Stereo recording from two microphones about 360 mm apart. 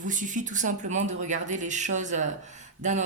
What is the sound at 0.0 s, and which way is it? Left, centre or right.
Speech, right.